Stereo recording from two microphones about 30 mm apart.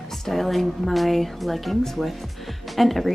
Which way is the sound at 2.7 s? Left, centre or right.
Centre.